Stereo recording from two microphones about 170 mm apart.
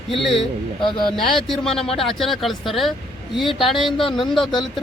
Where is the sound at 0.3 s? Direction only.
30° left (ahead or behind).